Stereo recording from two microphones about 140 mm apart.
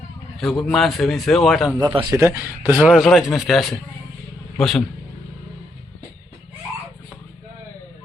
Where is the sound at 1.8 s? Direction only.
35° right (ahead or behind).